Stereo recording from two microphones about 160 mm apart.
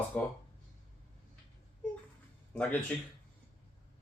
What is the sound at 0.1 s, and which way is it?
Speech, 5° left (ahead or behind).